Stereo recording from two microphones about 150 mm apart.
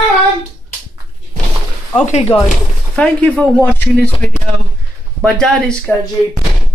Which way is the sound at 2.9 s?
10° left (ahead or behind).